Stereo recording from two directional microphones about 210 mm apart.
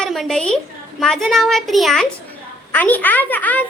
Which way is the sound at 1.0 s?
Centre (ahead or behind).